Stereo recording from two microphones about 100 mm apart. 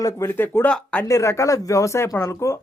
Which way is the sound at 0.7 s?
10° left (ahead or behind).